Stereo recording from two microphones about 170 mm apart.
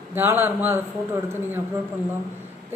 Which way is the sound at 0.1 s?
10° right (ahead or behind).